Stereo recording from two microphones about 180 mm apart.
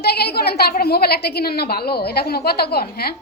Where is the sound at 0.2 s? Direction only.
60° left (ahead or behind).